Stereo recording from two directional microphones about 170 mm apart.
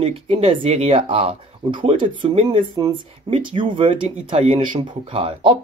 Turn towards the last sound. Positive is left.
turn(degrees=-30)  # may be behind; listen again after turning